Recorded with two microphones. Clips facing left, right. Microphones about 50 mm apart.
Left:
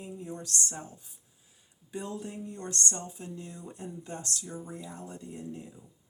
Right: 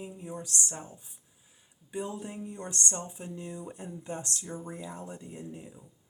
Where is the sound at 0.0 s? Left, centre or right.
Centre.